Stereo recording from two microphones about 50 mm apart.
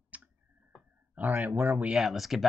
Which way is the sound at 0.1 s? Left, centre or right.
Right.